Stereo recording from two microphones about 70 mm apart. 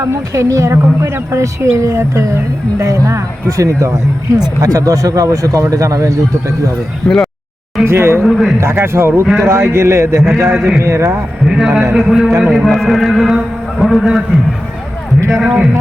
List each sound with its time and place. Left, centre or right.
0.3 s a woman's voice: right
7.1 s a man's voice: centre
7.9 s a man's voice: right
8.2 s a man's voice: centre
8.6 s a man's voice: right
9.2 s a man's voice: centre
9.5 s a man's voice: right
11.5 s a man's voice: centre
15.4 s speech: centre